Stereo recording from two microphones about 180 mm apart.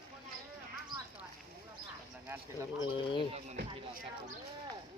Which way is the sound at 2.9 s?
30° left (ahead or behind).